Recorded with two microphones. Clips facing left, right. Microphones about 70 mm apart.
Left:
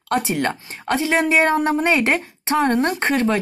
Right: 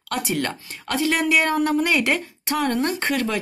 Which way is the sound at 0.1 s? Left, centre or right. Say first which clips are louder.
Left 4 dB; left.